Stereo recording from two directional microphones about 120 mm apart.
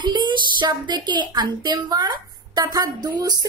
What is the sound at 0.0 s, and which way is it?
A woman's voice, 40° right (ahead or behind).